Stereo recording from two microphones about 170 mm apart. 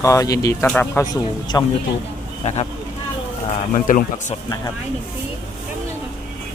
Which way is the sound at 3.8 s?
50° left (ahead or behind).